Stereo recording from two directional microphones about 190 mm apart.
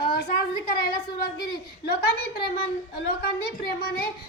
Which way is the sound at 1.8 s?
50° left (ahead or behind).